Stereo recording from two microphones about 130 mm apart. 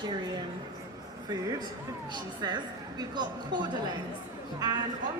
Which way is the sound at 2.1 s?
35° right (ahead or behind).